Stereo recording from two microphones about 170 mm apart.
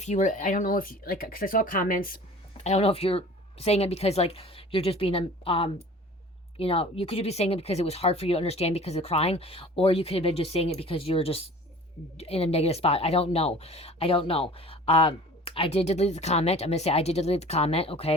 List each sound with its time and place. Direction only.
0.0 s speech: 45° left (ahead or behind)
2.6 s speech: 35° left (ahead or behind)